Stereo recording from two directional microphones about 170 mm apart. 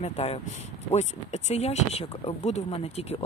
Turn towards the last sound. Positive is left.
turn(degrees=35)  # may be behind; listen again after turning